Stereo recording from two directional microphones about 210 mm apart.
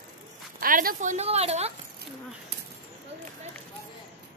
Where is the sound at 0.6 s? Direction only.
40° right (ahead or behind).